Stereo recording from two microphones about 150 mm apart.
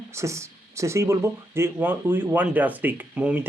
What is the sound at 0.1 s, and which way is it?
Speech, 20° right (ahead or behind).